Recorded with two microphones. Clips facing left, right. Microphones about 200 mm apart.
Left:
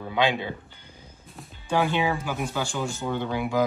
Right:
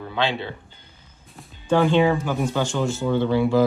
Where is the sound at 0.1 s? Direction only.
15° left (ahead or behind).